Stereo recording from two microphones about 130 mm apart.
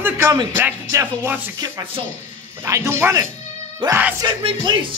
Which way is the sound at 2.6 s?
20° right (ahead or behind).